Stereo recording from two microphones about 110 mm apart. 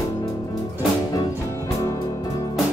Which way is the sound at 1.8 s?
30° left (ahead or behind).